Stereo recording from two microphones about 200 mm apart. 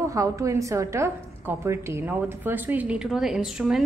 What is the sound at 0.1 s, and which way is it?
A woman's voice, 15° right (ahead or behind).